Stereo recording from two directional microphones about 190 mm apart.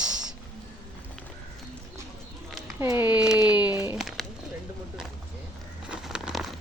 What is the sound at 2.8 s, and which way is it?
Speech, 15° right (ahead or behind).